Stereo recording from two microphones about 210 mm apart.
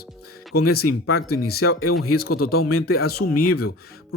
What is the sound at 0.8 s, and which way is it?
Speech, 90° left.